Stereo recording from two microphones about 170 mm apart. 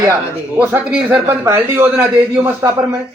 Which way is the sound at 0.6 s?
10° right (ahead or behind).